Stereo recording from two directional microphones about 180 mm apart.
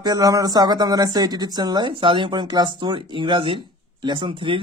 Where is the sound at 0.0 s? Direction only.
20° right (ahead or behind).